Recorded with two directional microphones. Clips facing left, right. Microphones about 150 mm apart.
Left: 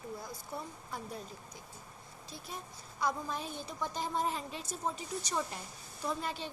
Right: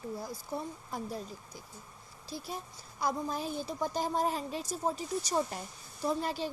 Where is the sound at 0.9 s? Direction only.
35° right (ahead or behind).